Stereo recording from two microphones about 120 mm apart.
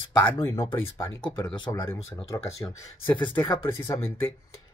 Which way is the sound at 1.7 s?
25° left (ahead or behind).